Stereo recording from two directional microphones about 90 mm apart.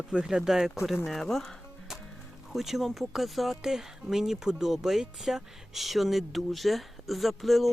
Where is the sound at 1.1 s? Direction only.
5° left (ahead or behind).